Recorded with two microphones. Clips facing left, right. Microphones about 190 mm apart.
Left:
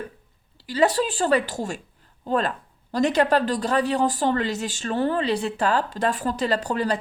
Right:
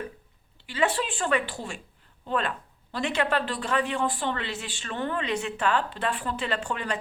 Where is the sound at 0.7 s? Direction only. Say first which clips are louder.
Left 6 dB; 40° left (ahead or behind).